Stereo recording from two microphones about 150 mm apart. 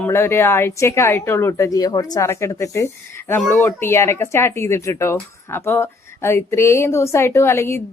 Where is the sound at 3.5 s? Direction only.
15° left (ahead or behind).